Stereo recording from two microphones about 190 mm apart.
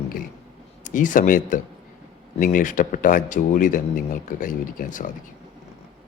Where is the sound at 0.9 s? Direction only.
45° left (ahead or behind).